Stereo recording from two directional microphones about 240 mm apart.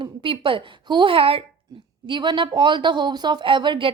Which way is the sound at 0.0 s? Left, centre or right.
Right.